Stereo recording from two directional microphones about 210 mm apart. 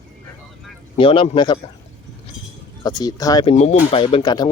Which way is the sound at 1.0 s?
25° left (ahead or behind).